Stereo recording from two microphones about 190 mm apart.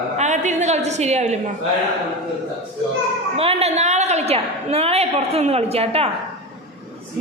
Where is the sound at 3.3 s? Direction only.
30° right (ahead or behind).